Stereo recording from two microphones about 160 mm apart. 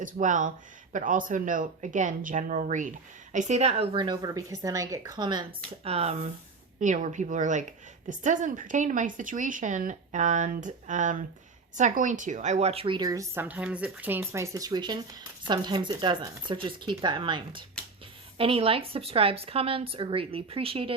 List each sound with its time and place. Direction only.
0.0 s a woman's voice: 55° right (ahead or behind)
6.7 s a woman's voice: 50° right (ahead or behind); by 20.9 s 35° right (ahead or behind)